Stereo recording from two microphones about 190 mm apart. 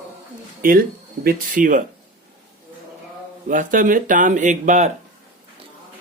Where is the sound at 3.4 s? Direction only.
45° right (ahead or behind).